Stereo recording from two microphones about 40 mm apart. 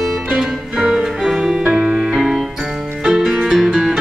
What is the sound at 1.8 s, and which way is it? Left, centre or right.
Music, centre.